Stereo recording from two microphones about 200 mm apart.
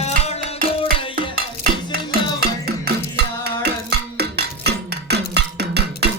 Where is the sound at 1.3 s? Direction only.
50° right (ahead or behind).